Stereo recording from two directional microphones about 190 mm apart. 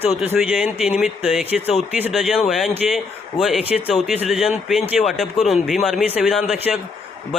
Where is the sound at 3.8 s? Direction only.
35° left (ahead or behind).